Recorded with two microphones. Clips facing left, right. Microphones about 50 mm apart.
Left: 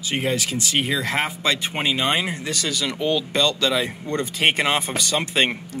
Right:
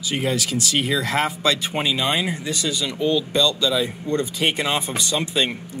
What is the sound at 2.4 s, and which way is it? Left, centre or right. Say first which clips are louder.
Speech: even; left.